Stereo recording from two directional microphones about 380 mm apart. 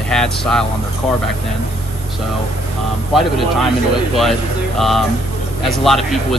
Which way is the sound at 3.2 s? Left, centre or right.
Centre.